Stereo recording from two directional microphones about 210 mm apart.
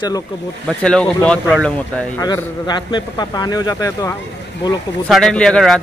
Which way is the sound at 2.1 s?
15° left (ahead or behind).